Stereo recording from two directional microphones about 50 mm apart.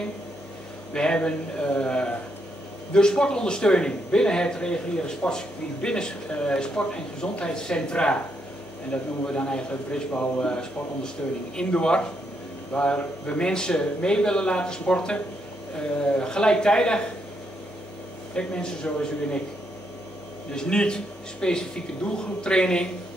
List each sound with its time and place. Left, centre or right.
0.9 s speech: centre
18.3 s speech: centre
20.5 s speech: centre